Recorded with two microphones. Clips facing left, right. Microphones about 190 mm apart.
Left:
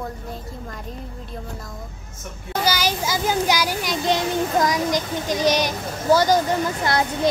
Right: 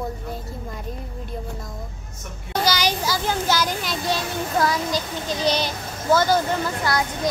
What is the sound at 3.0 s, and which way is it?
A child's voice, 15° left (ahead or behind).